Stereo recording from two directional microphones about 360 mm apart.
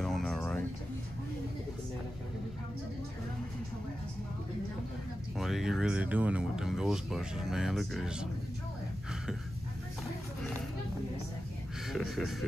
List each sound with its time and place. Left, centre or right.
0.0 s a sound: centre
5.4 s speech: centre
11.9 s speech: centre